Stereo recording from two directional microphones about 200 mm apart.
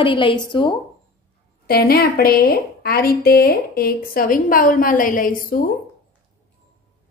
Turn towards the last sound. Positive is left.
turn(degrees=45)  # may be behind; listen again after turning